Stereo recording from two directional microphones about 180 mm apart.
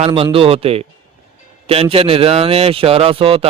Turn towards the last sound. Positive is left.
turn(degrees=-30)  # may be behind; listen again after turning